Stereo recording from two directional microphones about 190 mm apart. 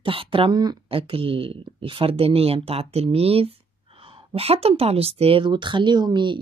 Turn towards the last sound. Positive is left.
turn(degrees=-25)  # may be behind; listen again after turning